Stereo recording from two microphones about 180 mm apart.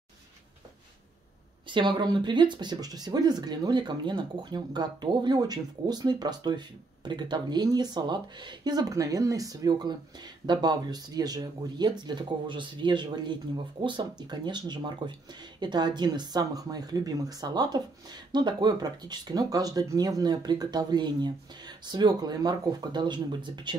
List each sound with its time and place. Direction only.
1.7 s speech: 25° right (ahead or behind)